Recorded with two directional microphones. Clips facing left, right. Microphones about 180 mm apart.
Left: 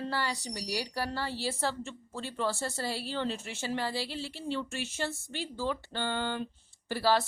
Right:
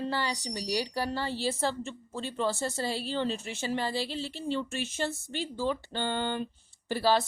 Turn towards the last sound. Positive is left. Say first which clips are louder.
# right 1 dB
turn(degrees=-20)  # may be behind; listen again after turning